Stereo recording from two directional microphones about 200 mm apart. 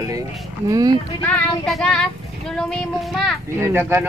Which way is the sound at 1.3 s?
5° left (ahead or behind).